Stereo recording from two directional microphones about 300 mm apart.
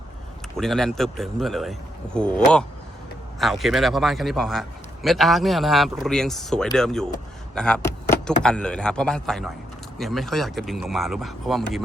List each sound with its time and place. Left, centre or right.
0.5 s speech: centre